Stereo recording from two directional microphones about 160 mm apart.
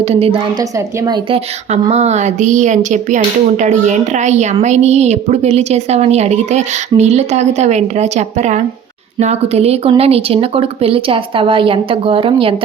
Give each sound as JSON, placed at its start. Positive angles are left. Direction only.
{"t": 0.0, "sound": "speech", "side_deg": -40}
{"t": 1.0, "sound": "speech", "side_deg": -25}
{"t": 1.7, "sound": "a woman's voice", "side_deg": -45}